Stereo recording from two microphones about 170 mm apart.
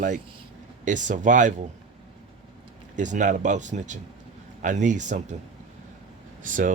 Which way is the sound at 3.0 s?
45° right (ahead or behind).